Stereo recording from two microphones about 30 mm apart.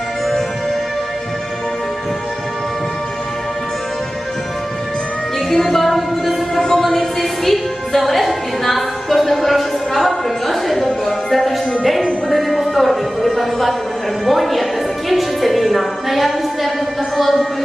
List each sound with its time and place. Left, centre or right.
5.5 s music: centre
6.6 s a sound: centre
6.8 s music: centre
14.3 s speech: centre
15.1 s music: centre
17.2 s speech: centre